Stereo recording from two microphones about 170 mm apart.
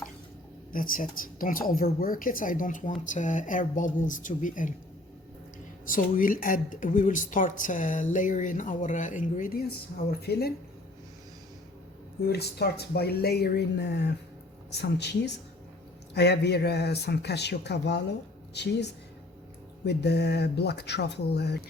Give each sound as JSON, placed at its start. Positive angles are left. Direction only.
{"t": 0.7, "sound": "a woman's voice", "side_deg": 55}
{"t": 5.8, "sound": "speech", "side_deg": 55}
{"t": 12.2, "sound": "speech", "side_deg": 70}